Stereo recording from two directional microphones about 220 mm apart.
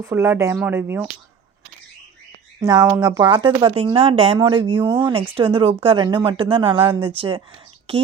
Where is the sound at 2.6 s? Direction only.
15° right (ahead or behind).